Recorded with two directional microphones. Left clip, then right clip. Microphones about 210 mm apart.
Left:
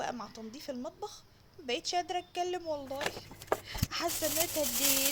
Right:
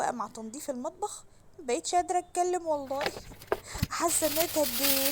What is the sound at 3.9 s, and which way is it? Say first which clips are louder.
Speech: right 6 dB; 25° right (ahead or behind).